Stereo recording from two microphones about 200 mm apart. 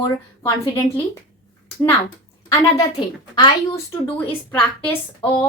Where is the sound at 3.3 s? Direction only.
20° left (ahead or behind).